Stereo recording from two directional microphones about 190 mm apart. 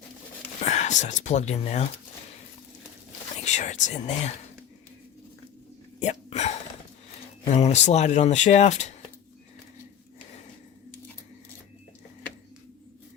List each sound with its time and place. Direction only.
0.6 s speech: 40° left (ahead or behind)
3.4 s speech: 40° left (ahead or behind)
6.0 s hiccup: 35° left (ahead or behind)
7.4 s speech: 35° left (ahead or behind)